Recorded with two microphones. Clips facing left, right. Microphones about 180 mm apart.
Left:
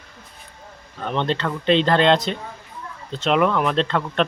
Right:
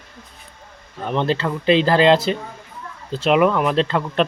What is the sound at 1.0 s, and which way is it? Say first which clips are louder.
Speech: right 2 dB; 5° right (ahead or behind).